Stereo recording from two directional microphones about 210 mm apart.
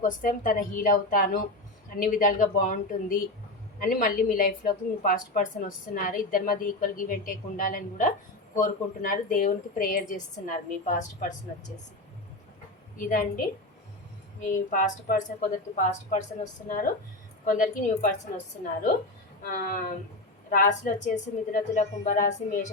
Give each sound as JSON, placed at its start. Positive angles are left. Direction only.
{"t": 0.0, "sound": "a woman's voice", "side_deg": 40}
{"t": 13.0, "sound": "a woman's voice", "side_deg": 40}
{"t": 14.4, "sound": "a woman's voice", "side_deg": 40}
{"t": 19.5, "sound": "a woman's voice", "side_deg": 40}